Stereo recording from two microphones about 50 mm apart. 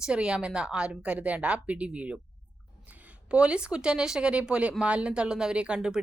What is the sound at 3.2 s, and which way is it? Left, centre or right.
A woman's voice, right.